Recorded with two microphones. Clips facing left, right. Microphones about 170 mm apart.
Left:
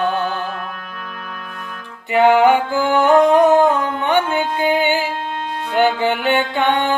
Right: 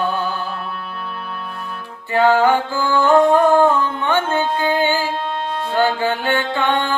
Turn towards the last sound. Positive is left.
turn(degrees=20)  # may be behind; listen again after turning